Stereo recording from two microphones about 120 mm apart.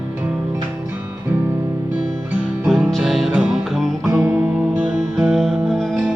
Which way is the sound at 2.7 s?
Centre (ahead or behind).